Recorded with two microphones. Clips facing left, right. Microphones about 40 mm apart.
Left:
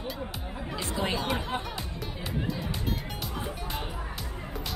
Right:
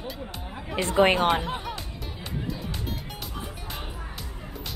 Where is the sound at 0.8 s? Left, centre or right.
Right.